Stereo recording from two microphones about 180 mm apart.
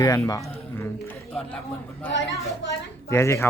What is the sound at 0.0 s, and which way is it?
Speech, 20° left (ahead or behind).